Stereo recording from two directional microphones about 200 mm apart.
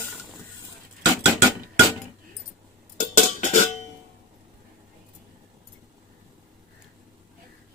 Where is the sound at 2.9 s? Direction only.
35° left (ahead or behind).